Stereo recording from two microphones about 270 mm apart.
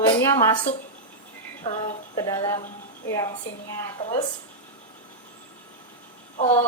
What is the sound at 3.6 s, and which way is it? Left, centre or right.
Speech, centre.